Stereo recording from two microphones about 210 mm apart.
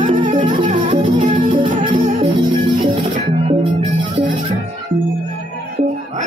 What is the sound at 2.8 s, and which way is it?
Music, 20° right (ahead or behind).